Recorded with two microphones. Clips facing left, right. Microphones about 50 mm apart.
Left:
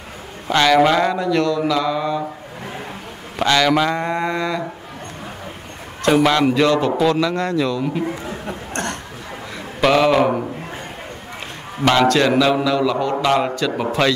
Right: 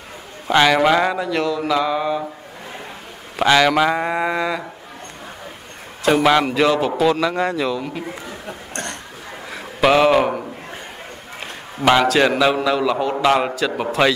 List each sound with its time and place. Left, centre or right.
0.5 s speech: centre
3.3 s speech: centre
6.0 s speech: centre
7.8 s a man's voice: centre
8.3 s chuckle: left
9.8 s speech: centre
11.8 s speech: centre